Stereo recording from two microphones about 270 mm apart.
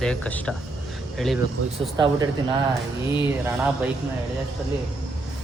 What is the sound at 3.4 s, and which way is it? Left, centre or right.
Speech, centre.